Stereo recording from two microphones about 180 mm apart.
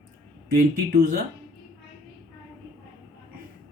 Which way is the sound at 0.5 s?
50° right (ahead or behind).